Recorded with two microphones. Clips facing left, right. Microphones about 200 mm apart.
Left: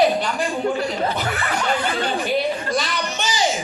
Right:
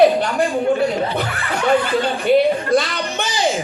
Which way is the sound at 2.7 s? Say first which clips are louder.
Right 6 dB; 55° right (ahead or behind).